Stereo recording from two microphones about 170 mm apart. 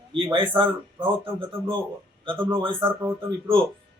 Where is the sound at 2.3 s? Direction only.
15° right (ahead or behind).